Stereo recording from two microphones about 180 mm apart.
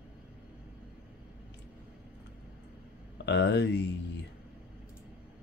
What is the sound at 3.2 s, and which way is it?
Speech, 75° left (ahead or behind).